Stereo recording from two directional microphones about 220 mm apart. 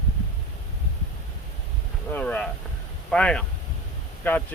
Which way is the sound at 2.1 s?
5° left (ahead or behind).